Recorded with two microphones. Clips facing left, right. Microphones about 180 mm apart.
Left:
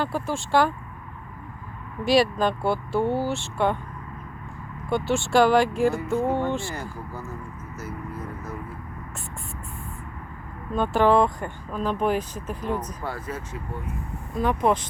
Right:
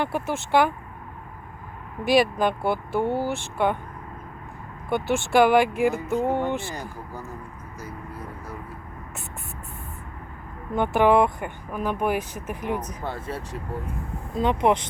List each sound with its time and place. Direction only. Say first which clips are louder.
0.0 s speech: right 1 dB; 20° right (ahead or behind)
2.1 s speech: even; 15° right (ahead or behind)
4.9 s speech: even; 15° right (ahead or behind)
7.8 s vehicle: left 3 dB; 10° right (ahead or behind)
10.7 s speech: right 1 dB; 20° right (ahead or behind)